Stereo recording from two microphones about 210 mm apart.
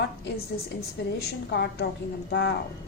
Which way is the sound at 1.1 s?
50° left (ahead or behind).